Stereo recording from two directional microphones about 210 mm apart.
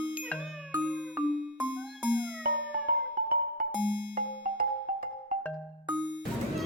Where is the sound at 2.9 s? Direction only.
40° right (ahead or behind).